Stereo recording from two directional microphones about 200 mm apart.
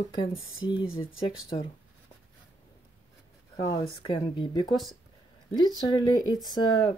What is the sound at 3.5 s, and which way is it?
Speech, 20° left (ahead or behind).